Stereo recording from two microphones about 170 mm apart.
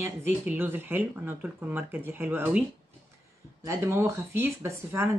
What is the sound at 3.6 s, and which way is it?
Speech, 15° right (ahead or behind).